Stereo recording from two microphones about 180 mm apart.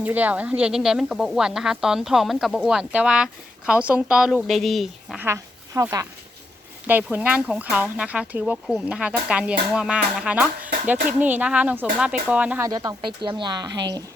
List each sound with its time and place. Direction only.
0.0 s speech: 10° right (ahead or behind)
5.2 s speech: 15° right (ahead or behind)
12.6 s speech: 20° right (ahead or behind)